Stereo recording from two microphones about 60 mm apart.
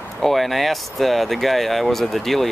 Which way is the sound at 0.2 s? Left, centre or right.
Centre.